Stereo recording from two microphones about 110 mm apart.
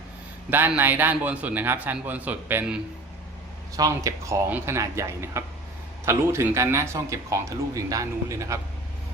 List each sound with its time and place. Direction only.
0.8 s a man's voice: 15° right (ahead or behind)
3.8 s speech: 30° right (ahead or behind)